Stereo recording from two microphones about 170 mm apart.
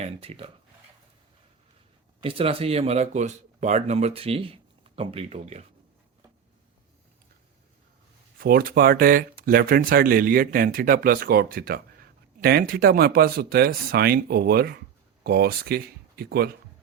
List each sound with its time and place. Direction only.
0.0 s speech: 35° right (ahead or behind)
2.2 s speech: 35° right (ahead or behind)
8.4 s speech: 60° right (ahead or behind)